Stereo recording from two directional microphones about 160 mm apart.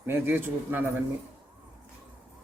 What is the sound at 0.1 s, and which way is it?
Speech, 10° right (ahead or behind).